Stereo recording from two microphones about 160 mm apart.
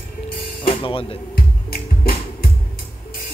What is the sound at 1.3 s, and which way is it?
Music, 70° left (ahead or behind).